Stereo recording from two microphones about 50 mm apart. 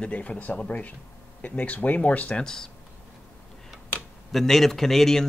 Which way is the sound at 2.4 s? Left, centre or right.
Centre.